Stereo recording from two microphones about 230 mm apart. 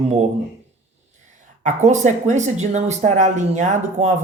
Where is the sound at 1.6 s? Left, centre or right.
Right.